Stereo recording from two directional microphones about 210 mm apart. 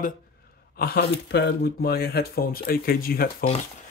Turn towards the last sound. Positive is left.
turn(degrees=45)  # may be behind; listen again after turning